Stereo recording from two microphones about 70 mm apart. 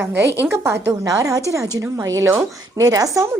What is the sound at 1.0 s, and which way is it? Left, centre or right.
A woman's voice, right.